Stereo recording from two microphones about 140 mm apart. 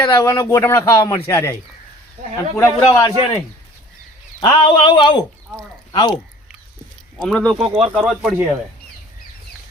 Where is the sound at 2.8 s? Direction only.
25° left (ahead or behind).